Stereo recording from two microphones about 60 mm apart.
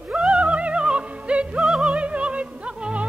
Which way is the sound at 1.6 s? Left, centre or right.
Centre.